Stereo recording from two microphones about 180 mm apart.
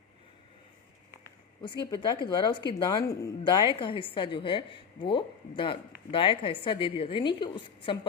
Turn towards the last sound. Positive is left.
turn(degrees=30)  # may be behind; listen again after turning